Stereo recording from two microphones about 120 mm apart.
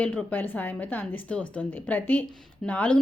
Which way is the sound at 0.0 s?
10° left (ahead or behind).